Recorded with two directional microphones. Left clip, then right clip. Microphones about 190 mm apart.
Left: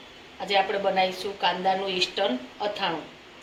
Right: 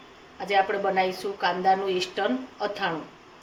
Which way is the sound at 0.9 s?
60° right (ahead or behind).